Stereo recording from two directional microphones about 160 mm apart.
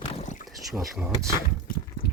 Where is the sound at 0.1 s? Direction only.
45° left (ahead or behind).